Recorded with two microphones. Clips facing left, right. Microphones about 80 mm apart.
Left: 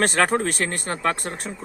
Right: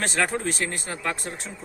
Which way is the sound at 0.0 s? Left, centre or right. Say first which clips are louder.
Left 5 dB; left.